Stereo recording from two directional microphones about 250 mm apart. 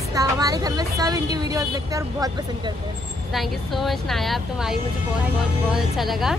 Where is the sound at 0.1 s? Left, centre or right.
Centre.